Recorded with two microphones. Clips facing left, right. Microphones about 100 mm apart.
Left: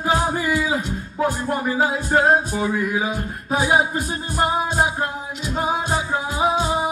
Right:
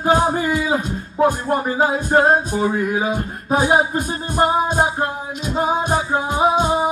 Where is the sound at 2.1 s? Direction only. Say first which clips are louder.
Right 1 dB; 30° right (ahead or behind).